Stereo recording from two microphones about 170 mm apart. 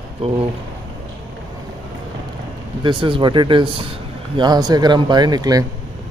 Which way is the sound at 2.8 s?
30° right (ahead or behind).